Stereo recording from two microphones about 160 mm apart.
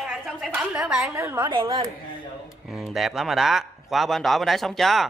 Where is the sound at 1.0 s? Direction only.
20° right (ahead or behind).